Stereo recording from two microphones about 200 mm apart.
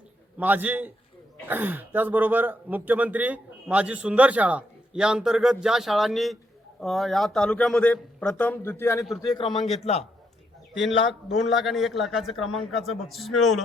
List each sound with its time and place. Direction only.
0.3 s a man's voice: 10° right (ahead or behind); by 9.5 s 20° left (ahead or behind)
9.5 s speech: centre (ahead or behind)
9.8 s a man's voice: 30° left (ahead or behind)
11.0 s speech: centre (ahead or behind)